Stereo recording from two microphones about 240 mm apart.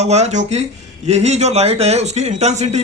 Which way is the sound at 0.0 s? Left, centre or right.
Right.